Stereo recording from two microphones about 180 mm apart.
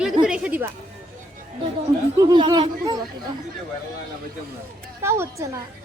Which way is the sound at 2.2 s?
25° right (ahead or behind).